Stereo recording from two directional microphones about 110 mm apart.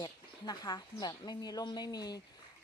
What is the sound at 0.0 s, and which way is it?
A woman's voice, 40° left (ahead or behind).